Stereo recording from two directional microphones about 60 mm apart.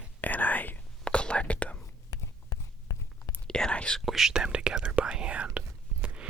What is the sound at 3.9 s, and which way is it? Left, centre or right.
Speech, centre.